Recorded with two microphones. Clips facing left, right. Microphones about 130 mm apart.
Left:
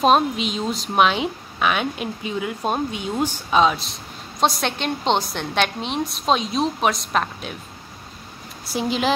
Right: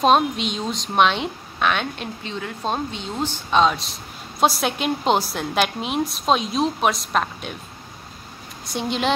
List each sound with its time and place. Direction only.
0.0 s a woman's voice: centre (ahead or behind)
8.6 s a woman's voice: centre (ahead or behind)